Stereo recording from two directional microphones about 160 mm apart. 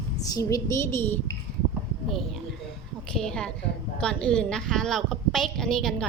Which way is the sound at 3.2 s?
5° left (ahead or behind).